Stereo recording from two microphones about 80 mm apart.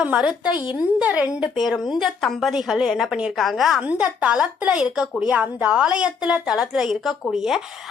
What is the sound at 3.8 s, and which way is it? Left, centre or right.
Speech, centre.